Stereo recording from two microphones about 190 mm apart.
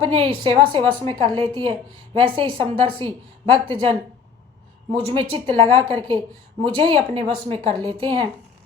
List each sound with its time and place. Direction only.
0.0 s a woman's voice: 30° right (ahead or behind)